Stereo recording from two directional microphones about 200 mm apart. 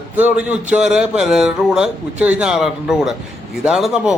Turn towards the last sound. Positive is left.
turn(degrees=0)  # may be behind; listen again after turning